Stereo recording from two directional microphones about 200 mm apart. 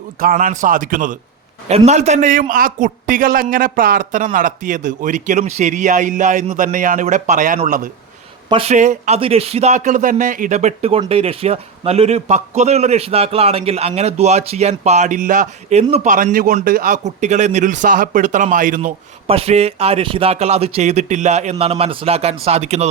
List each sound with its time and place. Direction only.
0.2 s a man's voice: 45° right (ahead or behind)
1.6 s speech: 30° right (ahead or behind)
8.4 s speech: 30° right (ahead or behind)